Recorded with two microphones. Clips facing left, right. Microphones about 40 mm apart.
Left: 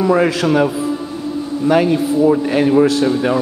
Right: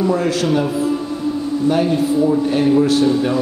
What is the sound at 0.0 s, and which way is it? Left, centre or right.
Speech, left.